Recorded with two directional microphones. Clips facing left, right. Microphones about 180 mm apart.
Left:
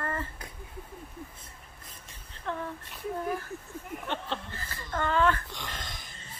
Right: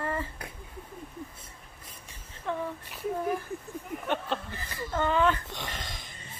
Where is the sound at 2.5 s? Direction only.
10° right (ahead or behind).